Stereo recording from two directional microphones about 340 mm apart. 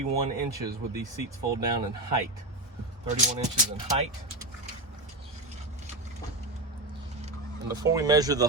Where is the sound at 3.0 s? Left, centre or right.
Centre.